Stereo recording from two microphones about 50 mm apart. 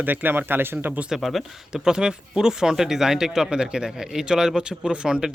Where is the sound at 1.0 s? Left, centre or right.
Centre.